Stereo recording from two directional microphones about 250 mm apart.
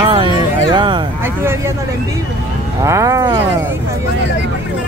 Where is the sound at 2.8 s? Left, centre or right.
Centre.